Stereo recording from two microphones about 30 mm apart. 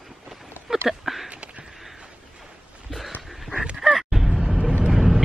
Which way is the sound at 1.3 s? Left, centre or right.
Right.